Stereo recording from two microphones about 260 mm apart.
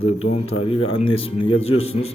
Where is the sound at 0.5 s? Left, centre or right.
Left.